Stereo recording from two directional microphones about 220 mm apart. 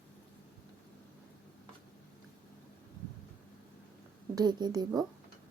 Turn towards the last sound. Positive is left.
turn(degrees=-20)  # may be behind; listen again after turning